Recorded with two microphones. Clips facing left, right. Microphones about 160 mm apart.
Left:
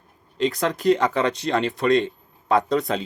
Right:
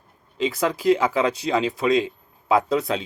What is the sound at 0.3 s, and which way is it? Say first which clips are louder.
Speech: even; centre (ahead or behind).